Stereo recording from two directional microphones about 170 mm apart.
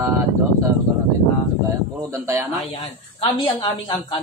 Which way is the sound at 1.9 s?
20° right (ahead or behind).